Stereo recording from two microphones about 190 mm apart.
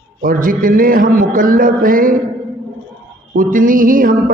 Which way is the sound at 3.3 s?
45° right (ahead or behind).